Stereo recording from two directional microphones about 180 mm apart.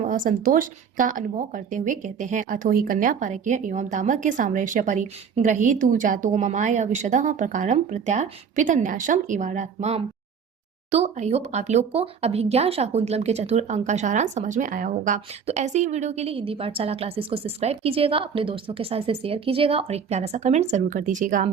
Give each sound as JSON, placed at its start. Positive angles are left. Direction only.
{"t": 0.0, "sound": "speech", "side_deg": -45}